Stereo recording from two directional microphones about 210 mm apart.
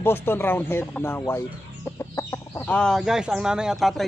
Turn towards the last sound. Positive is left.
turn(degrees=0)  # may be behind; listen again after turning